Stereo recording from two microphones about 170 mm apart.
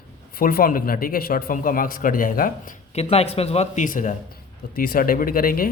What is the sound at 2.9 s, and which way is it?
Speech, 40° left (ahead or behind).